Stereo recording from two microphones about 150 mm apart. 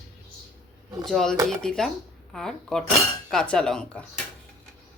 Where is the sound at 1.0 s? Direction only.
Centre (ahead or behind).